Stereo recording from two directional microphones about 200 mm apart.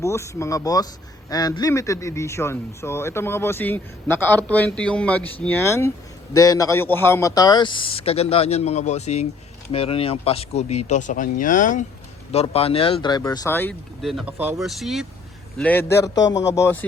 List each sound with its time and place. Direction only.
0.0 s a man's voice: 15° left (ahead or behind)